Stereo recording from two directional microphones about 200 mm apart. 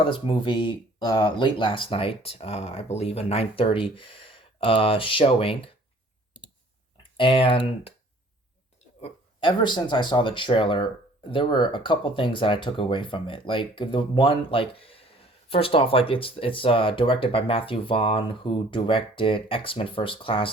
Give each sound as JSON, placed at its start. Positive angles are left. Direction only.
{"t": 0.0, "sound": "speech", "side_deg": 25}
{"t": 6.9, "sound": "speech", "side_deg": 25}
{"t": 9.0, "sound": "speech", "side_deg": 25}